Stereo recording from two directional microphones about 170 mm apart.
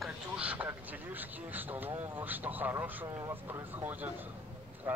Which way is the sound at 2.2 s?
10° right (ahead or behind).